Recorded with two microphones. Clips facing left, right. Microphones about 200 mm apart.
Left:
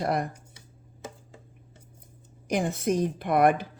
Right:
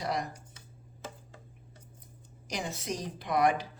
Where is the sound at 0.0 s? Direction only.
55° left (ahead or behind).